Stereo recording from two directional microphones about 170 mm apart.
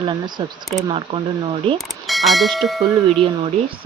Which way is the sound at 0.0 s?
25° right (ahead or behind).